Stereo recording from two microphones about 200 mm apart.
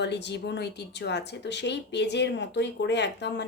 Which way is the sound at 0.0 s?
60° left (ahead or behind).